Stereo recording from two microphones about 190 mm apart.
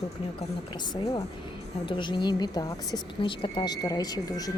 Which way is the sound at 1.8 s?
25° left (ahead or behind).